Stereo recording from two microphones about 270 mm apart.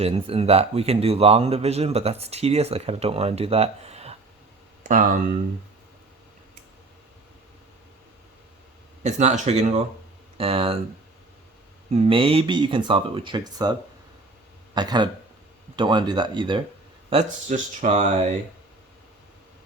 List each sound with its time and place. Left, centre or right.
0.0 s speech: right
9.0 s speech: right
11.9 s speech: right
14.8 s speech: centre